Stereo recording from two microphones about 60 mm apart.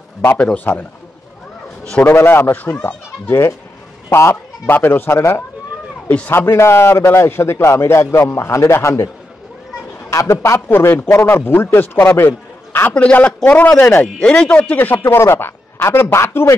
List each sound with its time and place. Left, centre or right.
0.7 s a man's voice: left
2.0 s a man's voice: left
4.1 s fowl: left
4.7 s a man's voice: left
6.0 s a man's voice: left
6.3 s a man's voice: left
12.9 s a man's voice: left
14.0 s speech: centre
14.9 s speech: left